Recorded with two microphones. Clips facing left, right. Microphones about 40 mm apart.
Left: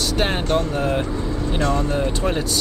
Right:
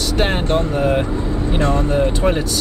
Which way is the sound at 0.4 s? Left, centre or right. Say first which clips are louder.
Right 2 dB; right.